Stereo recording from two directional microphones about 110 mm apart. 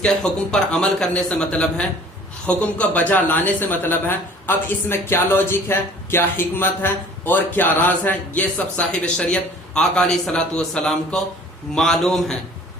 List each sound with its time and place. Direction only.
0.0 s a man's voice: 5° left (ahead or behind)